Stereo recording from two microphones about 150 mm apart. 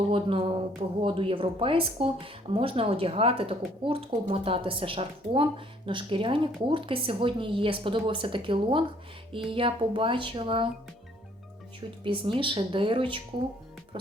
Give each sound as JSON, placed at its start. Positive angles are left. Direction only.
{"t": 0.1, "sound": "speech", "side_deg": -35}
{"t": 12.0, "sound": "speech", "side_deg": -35}